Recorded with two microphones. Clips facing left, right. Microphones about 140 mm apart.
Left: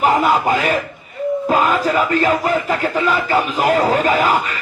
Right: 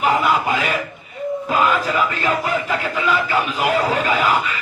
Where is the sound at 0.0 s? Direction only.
45° left (ahead or behind).